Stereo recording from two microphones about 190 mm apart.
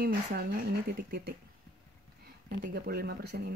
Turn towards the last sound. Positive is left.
turn(degrees=-55)  # may be behind; listen again after turning